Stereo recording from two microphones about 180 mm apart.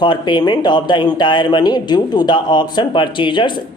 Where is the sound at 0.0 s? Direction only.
25° left (ahead or behind).